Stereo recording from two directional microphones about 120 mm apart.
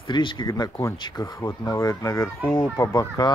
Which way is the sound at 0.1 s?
40° left (ahead or behind).